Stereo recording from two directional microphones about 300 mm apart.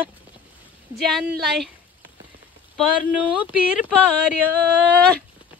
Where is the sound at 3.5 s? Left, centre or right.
Left.